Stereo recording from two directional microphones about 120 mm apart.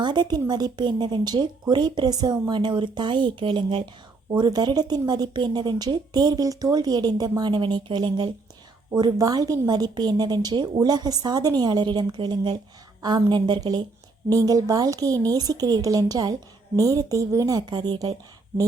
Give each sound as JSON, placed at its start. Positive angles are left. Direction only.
{"t": 0.0, "sound": "a woman's voice", "side_deg": -40}